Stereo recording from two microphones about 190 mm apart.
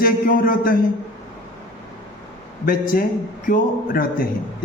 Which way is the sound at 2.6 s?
50° left (ahead or behind).